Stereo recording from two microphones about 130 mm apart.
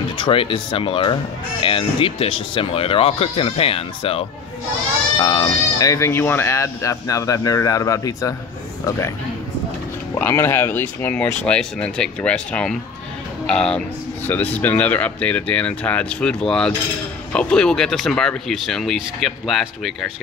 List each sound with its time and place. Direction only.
0.2 s speech: 45° left (ahead or behind)
5.2 s speech: 35° left (ahead or behind)
10.1 s speech: 15° left (ahead or behind); by 20.1 s centre (ahead or behind)